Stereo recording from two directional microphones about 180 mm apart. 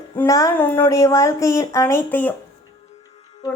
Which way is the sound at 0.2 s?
20° left (ahead or behind).